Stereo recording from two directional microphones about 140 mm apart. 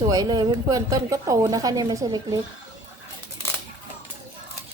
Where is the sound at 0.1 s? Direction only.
25° right (ahead or behind).